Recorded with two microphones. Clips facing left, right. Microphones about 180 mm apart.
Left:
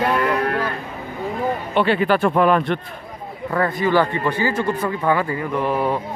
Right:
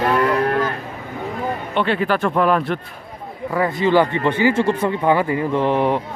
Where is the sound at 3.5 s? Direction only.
20° right (ahead or behind).